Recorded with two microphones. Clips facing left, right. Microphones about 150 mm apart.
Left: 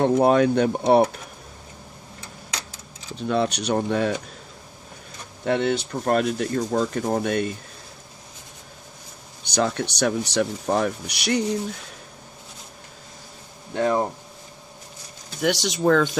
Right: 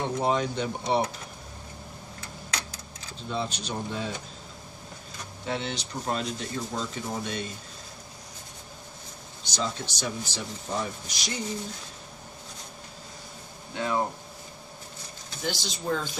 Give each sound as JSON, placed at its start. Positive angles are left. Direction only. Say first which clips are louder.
{"t": 0.0, "sound": "speech", "louder": "left 9 dB", "side_deg": 60}
{"t": 3.2, "sound": "speech", "louder": "left 9 dB", "side_deg": 70}
{"t": 5.4, "sound": "speech", "louder": "left 10 dB", "side_deg": 60}
{"t": 9.6, "sound": "speech", "louder": "left 9 dB", "side_deg": 65}
{"t": 13.7, "sound": "speech", "louder": "left 7 dB", "side_deg": 50}
{"t": 15.4, "sound": "speech", "louder": "left 11 dB", "side_deg": 85}